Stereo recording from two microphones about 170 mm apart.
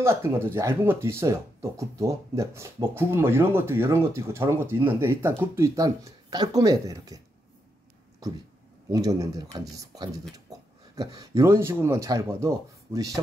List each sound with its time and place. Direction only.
0.0 s speech: 15° right (ahead or behind)
8.9 s speech: 20° right (ahead or behind)
10.5 s a sound: 20° right (ahead or behind)
11.0 s speech: 20° right (ahead or behind)